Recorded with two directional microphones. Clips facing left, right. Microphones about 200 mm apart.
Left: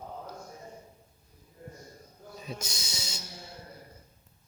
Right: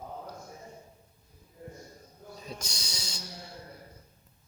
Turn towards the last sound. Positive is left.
turn(degrees=25)  # may be behind; listen again after turning